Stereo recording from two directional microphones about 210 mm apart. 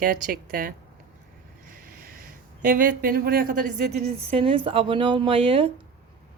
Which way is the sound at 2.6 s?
40° right (ahead or behind).